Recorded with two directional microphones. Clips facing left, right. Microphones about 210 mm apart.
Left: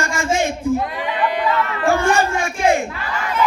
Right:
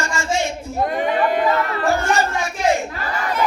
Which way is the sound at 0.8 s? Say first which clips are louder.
Right 3 dB; 45° right (ahead or behind).